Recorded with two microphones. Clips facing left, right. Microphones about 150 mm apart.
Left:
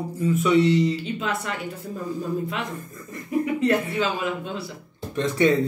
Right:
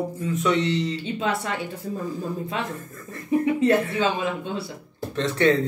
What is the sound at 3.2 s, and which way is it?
Speech, 25° right (ahead or behind).